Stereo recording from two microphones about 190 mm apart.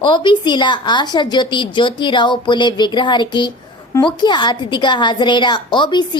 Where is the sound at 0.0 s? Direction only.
25° left (ahead or behind).